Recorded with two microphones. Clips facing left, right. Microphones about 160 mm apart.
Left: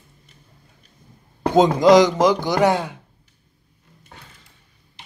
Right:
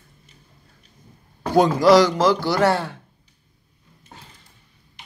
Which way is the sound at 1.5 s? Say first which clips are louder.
Left 1 dB; 20° left (ahead or behind).